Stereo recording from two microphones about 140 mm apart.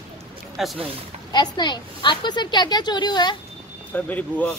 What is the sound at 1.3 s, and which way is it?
A woman's voice, 30° left (ahead or behind).